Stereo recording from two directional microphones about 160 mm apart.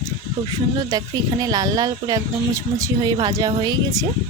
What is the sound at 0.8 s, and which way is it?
Speech, 25° right (ahead or behind).